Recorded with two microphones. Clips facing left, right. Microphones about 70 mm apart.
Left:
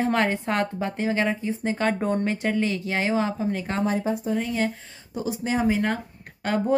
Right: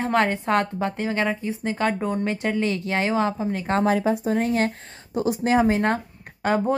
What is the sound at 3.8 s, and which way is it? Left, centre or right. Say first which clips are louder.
Speech: right 4 dB; right.